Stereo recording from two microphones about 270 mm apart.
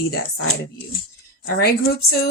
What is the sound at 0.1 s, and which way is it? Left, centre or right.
A woman's voice, left.